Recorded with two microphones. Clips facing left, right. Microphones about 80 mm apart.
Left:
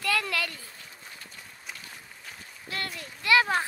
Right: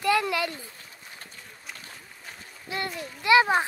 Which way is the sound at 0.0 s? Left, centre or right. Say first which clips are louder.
Right 5 dB; right.